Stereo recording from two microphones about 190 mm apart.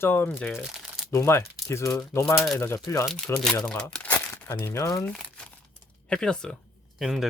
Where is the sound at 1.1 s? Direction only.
15° left (ahead or behind).